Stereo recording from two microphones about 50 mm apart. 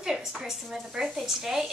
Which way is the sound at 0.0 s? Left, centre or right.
Centre.